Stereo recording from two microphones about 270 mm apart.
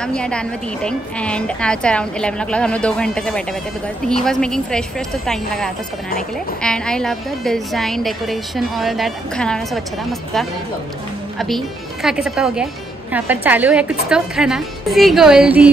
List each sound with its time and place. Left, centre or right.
0.0 s a woman's voice: centre
11.3 s a woman's voice: centre